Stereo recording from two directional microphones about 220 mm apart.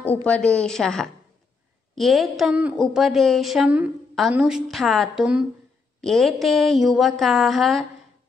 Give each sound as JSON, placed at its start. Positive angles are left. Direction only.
{"t": 0.0, "sound": "a woman's voice", "side_deg": 5}